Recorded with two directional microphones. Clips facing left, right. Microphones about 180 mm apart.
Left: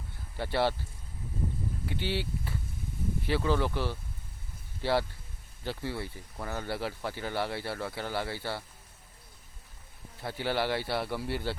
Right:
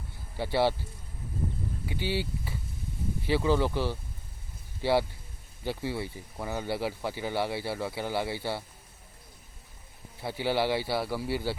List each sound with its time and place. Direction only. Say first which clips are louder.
0.3 s speech: right 2 dB; 10° right (ahead or behind)
1.9 s speech: right 2 dB; 10° right (ahead or behind)
10.2 s speech: right 3 dB; 15° right (ahead or behind)